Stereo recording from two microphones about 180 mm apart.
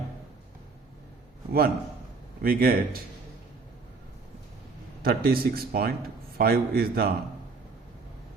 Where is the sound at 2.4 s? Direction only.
55° right (ahead or behind).